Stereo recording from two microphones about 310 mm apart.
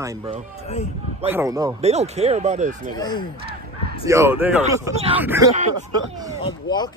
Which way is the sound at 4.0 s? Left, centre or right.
Centre.